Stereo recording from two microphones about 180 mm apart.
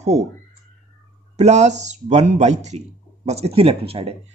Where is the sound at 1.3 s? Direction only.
40° right (ahead or behind).